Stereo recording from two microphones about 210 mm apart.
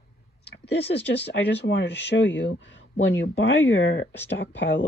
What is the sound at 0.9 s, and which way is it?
Speech, 55° left (ahead or behind).